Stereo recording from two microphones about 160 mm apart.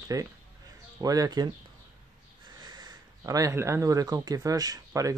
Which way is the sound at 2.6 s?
25° right (ahead or behind).